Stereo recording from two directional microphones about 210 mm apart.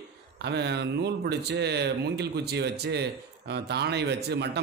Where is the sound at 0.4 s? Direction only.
50° right (ahead or behind).